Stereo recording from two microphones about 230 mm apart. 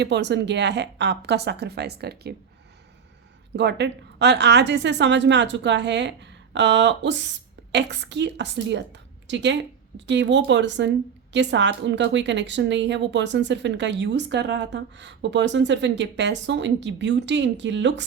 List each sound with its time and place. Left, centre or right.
0.0 s a woman's voice: right
3.5 s a woman's voice: right